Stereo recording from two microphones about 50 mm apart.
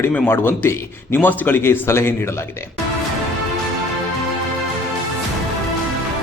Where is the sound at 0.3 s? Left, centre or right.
Left.